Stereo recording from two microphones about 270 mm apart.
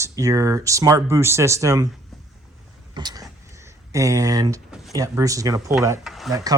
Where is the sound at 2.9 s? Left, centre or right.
Centre.